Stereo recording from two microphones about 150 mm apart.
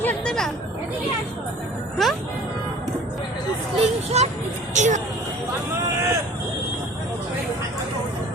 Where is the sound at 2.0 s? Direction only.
Centre (ahead or behind).